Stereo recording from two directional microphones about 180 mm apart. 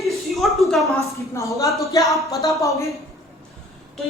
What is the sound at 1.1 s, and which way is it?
Speech, 15° left (ahead or behind).